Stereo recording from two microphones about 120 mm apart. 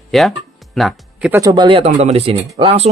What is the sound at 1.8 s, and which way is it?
Speech, 60° right (ahead or behind).